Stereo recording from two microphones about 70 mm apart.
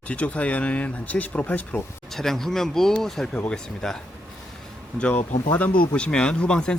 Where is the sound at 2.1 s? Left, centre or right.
Centre.